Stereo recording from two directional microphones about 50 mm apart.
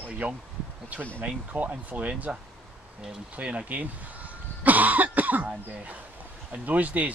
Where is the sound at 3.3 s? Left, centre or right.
Right.